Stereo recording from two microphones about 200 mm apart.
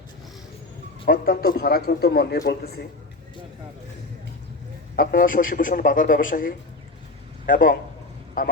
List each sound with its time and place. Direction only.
1.0 s a man's voice: 50° left (ahead or behind)
4.9 s a man's voice: 45° left (ahead or behind)